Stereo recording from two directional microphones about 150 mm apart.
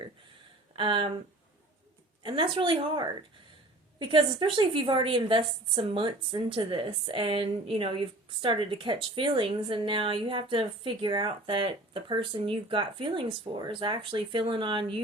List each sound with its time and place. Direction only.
0.8 s a woman's voice: 35° right (ahead or behind)
2.2 s a woman's voice: 35° right (ahead or behind)
4.1 s a woman's voice: 35° right (ahead or behind)